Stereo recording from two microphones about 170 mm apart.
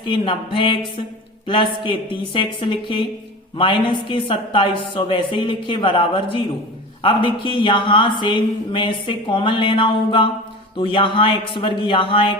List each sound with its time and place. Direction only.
0.0 s speech: 30° left (ahead or behind)